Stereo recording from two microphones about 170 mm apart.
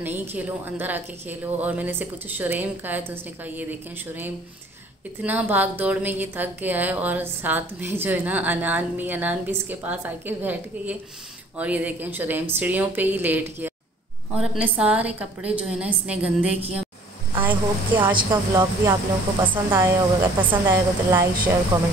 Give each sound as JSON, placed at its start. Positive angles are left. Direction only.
{"t": 0.0, "sound": "a woman's voice", "side_deg": -10}
{"t": 5.2, "sound": "a woman's voice", "side_deg": -10}
{"t": 18.1, "sound": "a woman's voice", "side_deg": -25}